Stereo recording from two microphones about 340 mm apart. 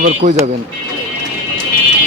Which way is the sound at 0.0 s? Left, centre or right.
Right.